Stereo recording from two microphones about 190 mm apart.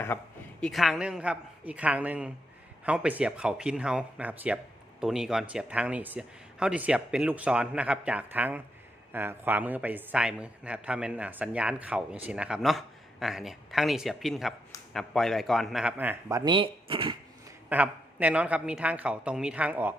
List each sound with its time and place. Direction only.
0.1 s a woman's voice: 10° left (ahead or behind)
0.6 s speech: centre (ahead or behind)
16.4 s speech: 25° right (ahead or behind)
17.7 s a man's voice: 10° right (ahead or behind)